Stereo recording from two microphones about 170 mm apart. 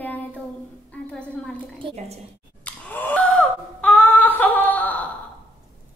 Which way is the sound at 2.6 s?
10° left (ahead or behind).